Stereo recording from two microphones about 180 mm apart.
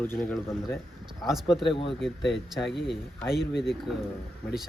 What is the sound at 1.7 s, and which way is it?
Speech, 30° left (ahead or behind).